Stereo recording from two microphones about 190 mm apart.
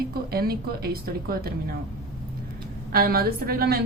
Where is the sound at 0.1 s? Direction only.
55° right (ahead or behind).